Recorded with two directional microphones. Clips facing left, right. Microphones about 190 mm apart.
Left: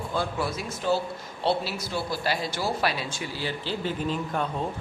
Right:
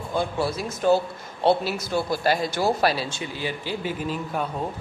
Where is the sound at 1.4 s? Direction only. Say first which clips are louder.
Right 5 dB; 50° right (ahead or behind).